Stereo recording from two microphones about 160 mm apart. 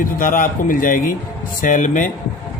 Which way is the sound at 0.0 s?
60° left (ahead or behind).